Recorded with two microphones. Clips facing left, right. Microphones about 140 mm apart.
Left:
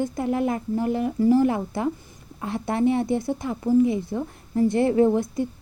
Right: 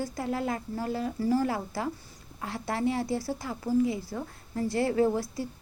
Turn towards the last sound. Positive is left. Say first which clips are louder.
# left 6 dB
turn(degrees=20)  # may be behind; listen again after turning